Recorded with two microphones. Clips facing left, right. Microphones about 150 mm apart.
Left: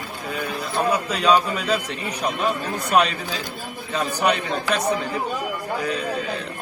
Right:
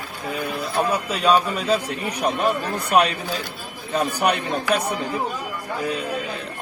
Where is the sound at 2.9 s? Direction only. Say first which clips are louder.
Right 1 dB; 5° right (ahead or behind).